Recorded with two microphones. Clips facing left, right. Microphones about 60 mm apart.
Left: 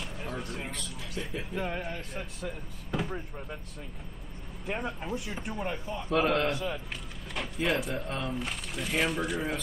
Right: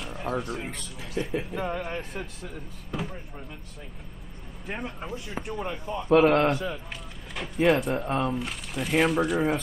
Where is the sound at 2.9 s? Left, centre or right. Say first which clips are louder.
Even; centre.